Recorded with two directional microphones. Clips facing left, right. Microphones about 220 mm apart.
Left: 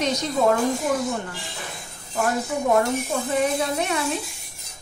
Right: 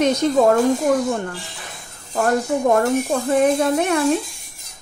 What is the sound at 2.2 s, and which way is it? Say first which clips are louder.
Speech: right 5 dB; 50° right (ahead or behind).